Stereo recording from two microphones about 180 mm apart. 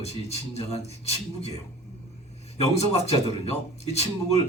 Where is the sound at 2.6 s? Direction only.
35° left (ahead or behind).